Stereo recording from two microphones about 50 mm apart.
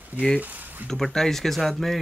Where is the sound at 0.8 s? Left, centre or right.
Centre.